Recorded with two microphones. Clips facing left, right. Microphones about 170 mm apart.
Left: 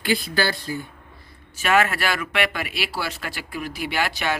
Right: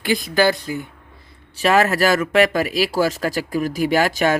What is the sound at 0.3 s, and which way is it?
Speech, 20° right (ahead or behind).